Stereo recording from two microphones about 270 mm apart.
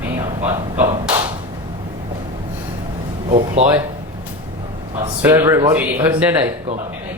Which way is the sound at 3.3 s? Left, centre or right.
Right.